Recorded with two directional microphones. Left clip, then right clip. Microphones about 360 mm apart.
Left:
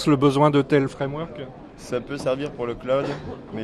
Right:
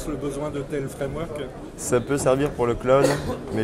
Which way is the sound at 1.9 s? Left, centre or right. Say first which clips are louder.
Right 4 dB; centre.